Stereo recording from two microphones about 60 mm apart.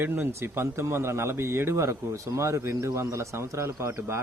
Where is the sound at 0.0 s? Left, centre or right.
Right.